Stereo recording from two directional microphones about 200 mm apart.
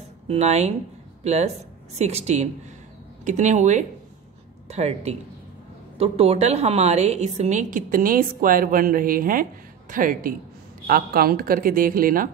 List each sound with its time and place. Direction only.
0.3 s a woman's voice: 35° right (ahead or behind)